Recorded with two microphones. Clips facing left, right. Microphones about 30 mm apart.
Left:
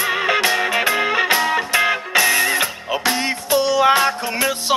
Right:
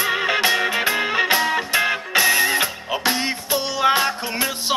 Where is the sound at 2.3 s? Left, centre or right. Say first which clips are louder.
Left 1 dB; centre.